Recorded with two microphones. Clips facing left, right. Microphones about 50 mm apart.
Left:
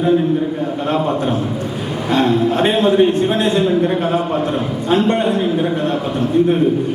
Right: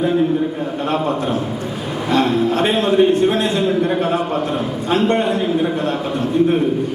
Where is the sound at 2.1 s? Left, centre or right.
Left.